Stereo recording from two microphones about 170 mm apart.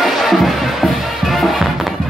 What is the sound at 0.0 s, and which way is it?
Music, centre (ahead or behind).